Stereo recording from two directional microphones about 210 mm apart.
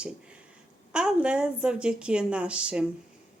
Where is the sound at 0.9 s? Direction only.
5° right (ahead or behind).